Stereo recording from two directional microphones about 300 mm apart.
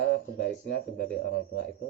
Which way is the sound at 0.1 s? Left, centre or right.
Left.